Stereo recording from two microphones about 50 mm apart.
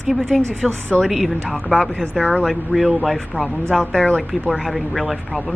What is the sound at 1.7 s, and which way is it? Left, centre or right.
Speech, centre.